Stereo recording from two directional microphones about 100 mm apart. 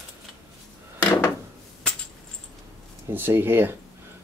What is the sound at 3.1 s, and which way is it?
Speech, 20° right (ahead or behind).